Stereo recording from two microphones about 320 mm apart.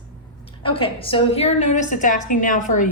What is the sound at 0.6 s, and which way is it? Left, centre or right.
A woman's voice, centre.